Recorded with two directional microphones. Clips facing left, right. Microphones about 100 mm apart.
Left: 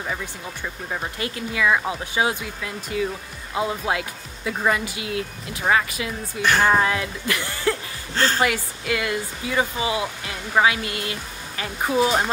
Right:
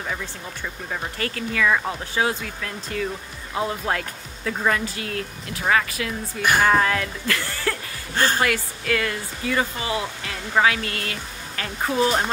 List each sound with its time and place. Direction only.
0.0 s speech: 10° left (ahead or behind)
8.1 s a woman's voice: 15° right (ahead or behind)
8.4 s speech: 15° left (ahead or behind)